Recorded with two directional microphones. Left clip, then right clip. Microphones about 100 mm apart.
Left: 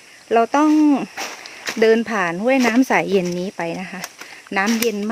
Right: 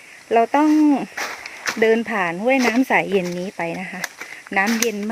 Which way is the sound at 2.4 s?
55° left (ahead or behind).